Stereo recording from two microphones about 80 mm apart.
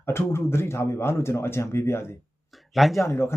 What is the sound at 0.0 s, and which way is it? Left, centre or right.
A man's voice, left.